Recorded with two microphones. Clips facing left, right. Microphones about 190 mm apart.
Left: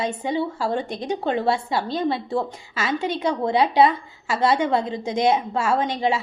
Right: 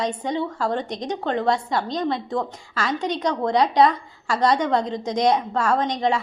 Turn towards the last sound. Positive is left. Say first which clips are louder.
# even
turn(degrees=5)  # may be behind; listen again after turning